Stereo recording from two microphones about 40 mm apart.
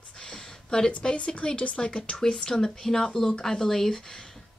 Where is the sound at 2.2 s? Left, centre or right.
Centre.